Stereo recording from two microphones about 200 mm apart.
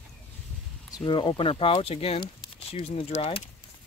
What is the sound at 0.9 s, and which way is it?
Speech, 25° left (ahead or behind).